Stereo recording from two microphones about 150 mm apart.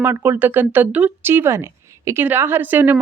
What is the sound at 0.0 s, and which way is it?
Speech, 15° right (ahead or behind).